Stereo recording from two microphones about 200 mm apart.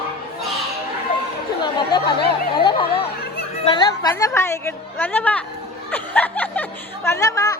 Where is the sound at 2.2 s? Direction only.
25° left (ahead or behind).